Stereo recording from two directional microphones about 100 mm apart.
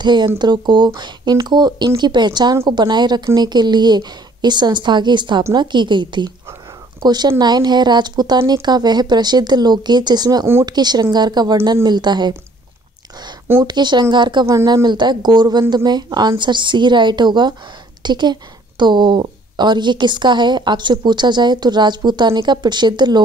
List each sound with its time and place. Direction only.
0.0 s a woman's voice: 50° right (ahead or behind)
13.7 s a woman's voice: 45° right (ahead or behind)
14.4 s speech: 30° right (ahead or behind)
14.7 s a woman's voice: 45° right (ahead or behind)